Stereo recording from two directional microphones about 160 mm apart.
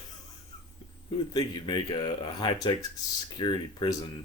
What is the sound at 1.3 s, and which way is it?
Speech, 30° left (ahead or behind).